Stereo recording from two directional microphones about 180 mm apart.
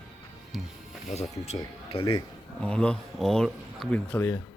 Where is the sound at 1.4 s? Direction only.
35° left (ahead or behind).